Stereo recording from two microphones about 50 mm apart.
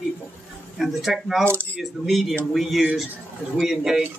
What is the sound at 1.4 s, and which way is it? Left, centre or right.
Speech, right.